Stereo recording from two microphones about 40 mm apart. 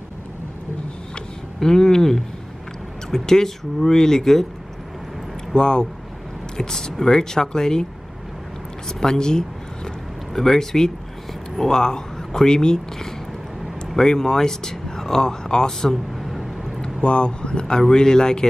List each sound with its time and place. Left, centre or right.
1.6 s speech: centre
5.5 s speech: centre
8.8 s speech: centre